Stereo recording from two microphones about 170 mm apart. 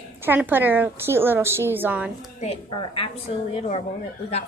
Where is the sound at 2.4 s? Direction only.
35° left (ahead or behind).